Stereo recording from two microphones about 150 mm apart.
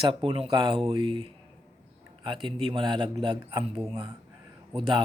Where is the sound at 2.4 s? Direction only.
35° right (ahead or behind).